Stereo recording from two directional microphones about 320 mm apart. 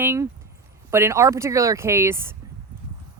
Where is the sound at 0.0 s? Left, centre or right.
Centre.